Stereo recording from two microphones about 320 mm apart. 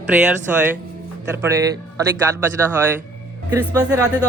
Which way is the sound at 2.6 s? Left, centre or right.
Centre.